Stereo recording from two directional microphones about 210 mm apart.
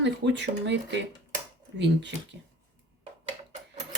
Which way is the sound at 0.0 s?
55° right (ahead or behind).